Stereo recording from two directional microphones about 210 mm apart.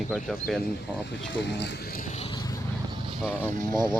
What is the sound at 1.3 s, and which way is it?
Speech, 55° left (ahead or behind).